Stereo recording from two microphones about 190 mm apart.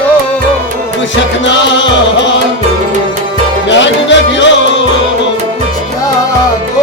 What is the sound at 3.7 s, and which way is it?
Music, 75° left (ahead or behind).